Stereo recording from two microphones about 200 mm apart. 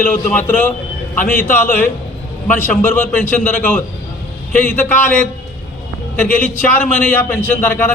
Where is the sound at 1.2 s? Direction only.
45° left (ahead or behind).